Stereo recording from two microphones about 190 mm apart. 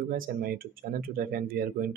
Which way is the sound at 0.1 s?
50° right (ahead or behind).